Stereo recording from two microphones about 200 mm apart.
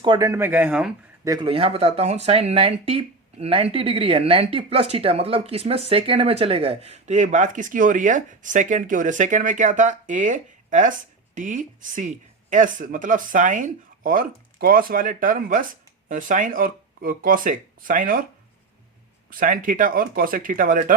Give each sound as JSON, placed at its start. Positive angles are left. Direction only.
{"t": 0.0, "sound": "speech", "side_deg": -20}
{"t": 1.3, "sound": "speech", "side_deg": -25}
{"t": 19.3, "sound": "speech", "side_deg": -45}